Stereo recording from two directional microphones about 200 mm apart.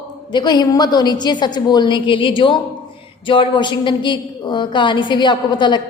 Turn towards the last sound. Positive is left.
turn(degrees=20)  # may be behind; listen again after turning